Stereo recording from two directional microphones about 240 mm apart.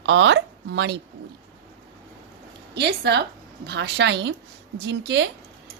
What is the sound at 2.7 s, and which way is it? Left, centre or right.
A woman's voice, right.